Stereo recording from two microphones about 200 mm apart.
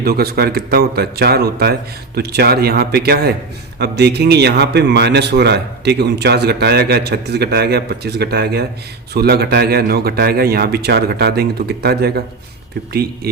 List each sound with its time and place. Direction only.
0.0 s a man's voice: 50° right (ahead or behind)